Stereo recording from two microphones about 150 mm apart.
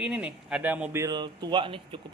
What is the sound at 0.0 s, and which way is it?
Speech, 10° right (ahead or behind).